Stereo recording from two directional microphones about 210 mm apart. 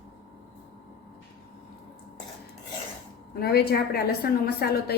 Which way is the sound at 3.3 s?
50° left (ahead or behind).